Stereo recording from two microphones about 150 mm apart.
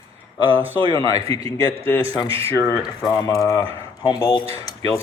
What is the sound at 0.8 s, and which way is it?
Speech, 35° right (ahead or behind).